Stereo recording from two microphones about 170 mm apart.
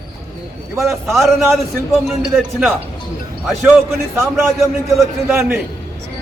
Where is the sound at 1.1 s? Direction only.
Centre (ahead or behind).